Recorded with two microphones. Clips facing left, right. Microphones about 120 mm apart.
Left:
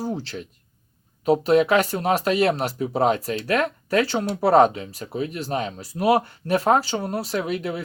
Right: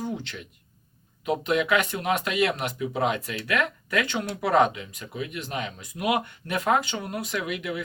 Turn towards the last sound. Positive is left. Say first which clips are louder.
# left 4 dB
turn(degrees=35)  # may be behind; listen again after turning